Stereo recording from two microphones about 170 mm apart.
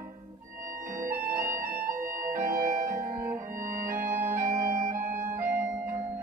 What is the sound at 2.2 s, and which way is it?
Organ, 15° right (ahead or behind).